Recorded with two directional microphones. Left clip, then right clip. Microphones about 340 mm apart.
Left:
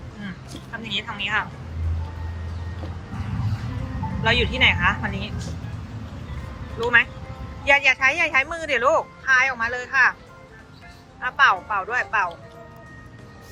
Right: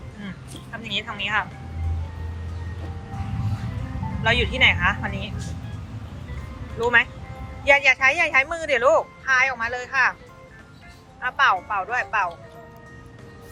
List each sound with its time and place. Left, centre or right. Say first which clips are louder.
0.7 s speech: even; centre
4.2 s speech: even; centre
6.7 s speech: even; centre
11.2 s speech: left 1 dB; centre